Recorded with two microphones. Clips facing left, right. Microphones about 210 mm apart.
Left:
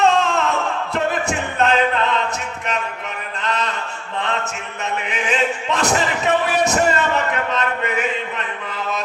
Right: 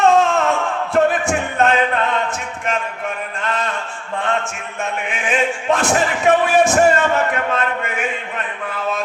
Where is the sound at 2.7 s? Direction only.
50° right (ahead or behind).